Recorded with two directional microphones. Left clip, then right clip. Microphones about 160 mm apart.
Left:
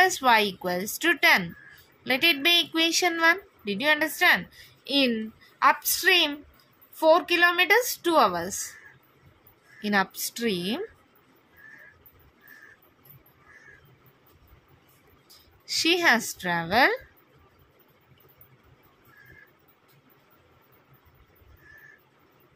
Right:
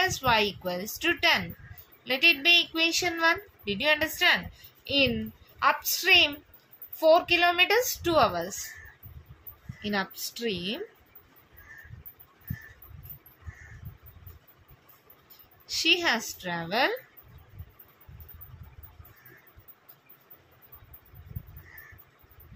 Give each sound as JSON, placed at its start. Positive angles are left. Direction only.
{"t": 0.0, "sound": "a woman's voice", "side_deg": 45}
{"t": 9.8, "sound": "speech", "side_deg": 50}
{"t": 15.6, "sound": "speech", "side_deg": 50}